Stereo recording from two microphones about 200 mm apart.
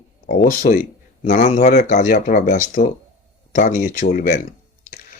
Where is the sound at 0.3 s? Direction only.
45° left (ahead or behind).